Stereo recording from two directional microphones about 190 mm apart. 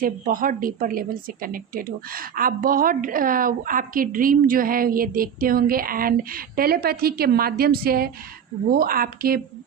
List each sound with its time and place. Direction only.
0.0 s a woman's voice: 45° right (ahead or behind)